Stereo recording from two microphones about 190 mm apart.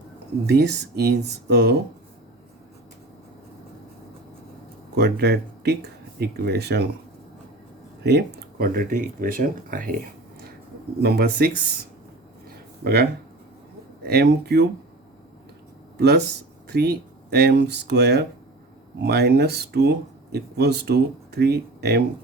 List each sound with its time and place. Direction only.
0.4 s speech: 60° right (ahead or behind)
4.9 s speech: 60° right (ahead or behind)
8.0 s speech: 60° right (ahead or behind)
11.0 s speech: 55° right (ahead or behind)
12.8 s speech: 55° right (ahead or behind)
16.0 s speech: 60° right (ahead or behind)